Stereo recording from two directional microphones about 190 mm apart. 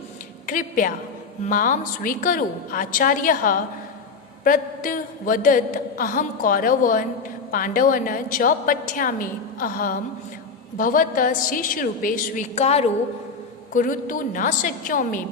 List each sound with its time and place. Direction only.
0.4 s a woman's voice: 45° left (ahead or behind)
13.7 s a woman's voice: 45° left (ahead or behind)